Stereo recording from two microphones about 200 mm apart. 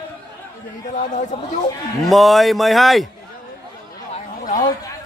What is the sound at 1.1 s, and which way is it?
Speech, 40° left (ahead or behind).